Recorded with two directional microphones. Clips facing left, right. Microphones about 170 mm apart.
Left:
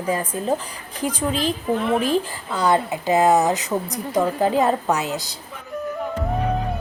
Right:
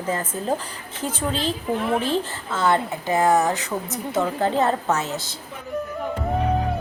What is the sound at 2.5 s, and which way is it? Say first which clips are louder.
A woman's voice: left 2 dB; 15° left (ahead or behind).